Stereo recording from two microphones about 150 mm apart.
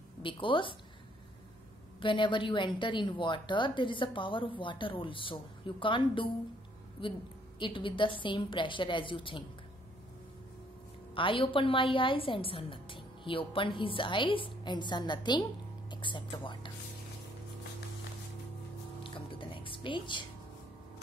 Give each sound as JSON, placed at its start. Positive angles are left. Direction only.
{"t": 0.2, "sound": "a woman's voice", "side_deg": 35}
{"t": 2.0, "sound": "a woman's voice", "side_deg": 35}
{"t": 11.1, "sound": "a woman's voice", "side_deg": 35}
{"t": 19.0, "sound": "music", "side_deg": 35}